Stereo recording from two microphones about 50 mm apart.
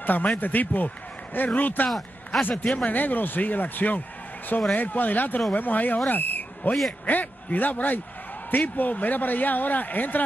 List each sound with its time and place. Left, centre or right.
0.0 s a man's voice: left
1.9 s speech: centre
2.7 s a man's voice: left
6.0 s a sound: left
7.1 s a man's voice: left